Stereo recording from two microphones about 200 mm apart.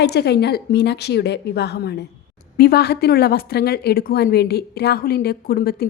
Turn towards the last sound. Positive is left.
turn(degrees=50)  # may be behind; listen again after turning